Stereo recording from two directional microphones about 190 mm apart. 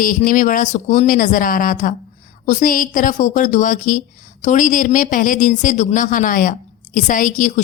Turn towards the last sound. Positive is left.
turn(degrees=40)  # may be behind; listen again after turning